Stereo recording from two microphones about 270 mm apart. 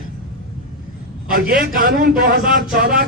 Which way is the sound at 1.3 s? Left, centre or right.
Right.